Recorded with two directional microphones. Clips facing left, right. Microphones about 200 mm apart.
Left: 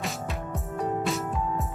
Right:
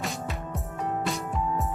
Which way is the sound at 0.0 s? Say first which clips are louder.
Even; centre (ahead or behind).